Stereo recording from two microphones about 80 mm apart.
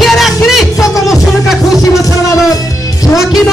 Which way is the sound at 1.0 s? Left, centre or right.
Centre.